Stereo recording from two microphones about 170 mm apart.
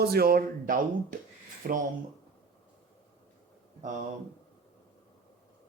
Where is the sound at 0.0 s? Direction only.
65° right (ahead or behind).